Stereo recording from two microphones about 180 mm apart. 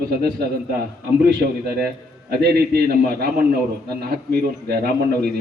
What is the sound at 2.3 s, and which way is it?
A man's voice, 60° right (ahead or behind).